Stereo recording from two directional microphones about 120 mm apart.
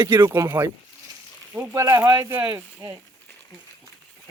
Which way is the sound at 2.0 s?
30° right (ahead or behind).